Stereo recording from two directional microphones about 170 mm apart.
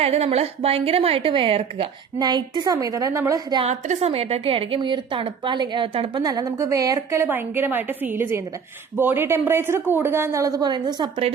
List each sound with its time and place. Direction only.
0.0 s a woman's voice: 40° right (ahead or behind)
3.7 s a woman's voice: 40° right (ahead or behind); by 11.1 s 25° right (ahead or behind)